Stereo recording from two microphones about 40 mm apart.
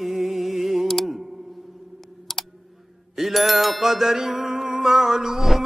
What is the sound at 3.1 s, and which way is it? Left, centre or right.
Music, centre.